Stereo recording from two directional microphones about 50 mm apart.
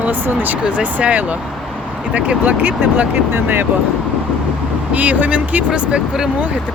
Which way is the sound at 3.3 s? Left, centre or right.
Right.